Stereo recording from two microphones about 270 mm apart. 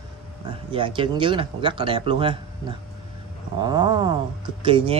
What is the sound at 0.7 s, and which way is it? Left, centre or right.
Speech, centre.